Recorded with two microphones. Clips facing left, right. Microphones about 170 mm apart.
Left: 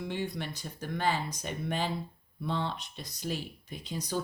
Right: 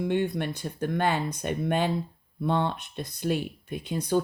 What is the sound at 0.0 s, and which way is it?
Speech, 55° right (ahead or behind).